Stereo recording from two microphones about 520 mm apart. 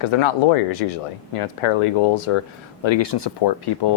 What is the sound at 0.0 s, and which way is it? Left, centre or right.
Speech, left.